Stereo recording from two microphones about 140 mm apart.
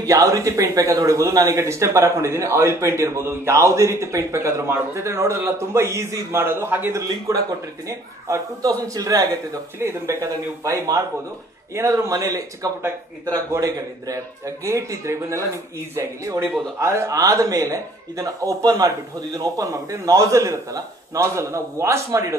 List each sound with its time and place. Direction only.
0.0 s a man's voice: 25° right (ahead or behind)